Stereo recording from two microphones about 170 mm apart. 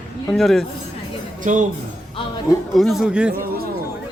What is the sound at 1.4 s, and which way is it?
Speech, 50° right (ahead or behind).